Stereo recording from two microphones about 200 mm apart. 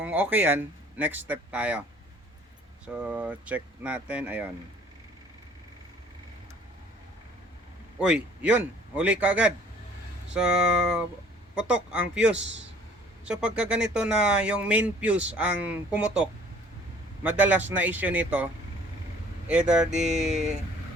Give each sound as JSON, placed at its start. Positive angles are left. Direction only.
{"t": 0.0, "sound": "speech", "side_deg": -10}
{"t": 2.8, "sound": "speech", "side_deg": -5}
{"t": 7.9, "sound": "speech", "side_deg": -5}
{"t": 19.5, "sound": "speech", "side_deg": -5}
{"t": 19.9, "sound": "music", "side_deg": -35}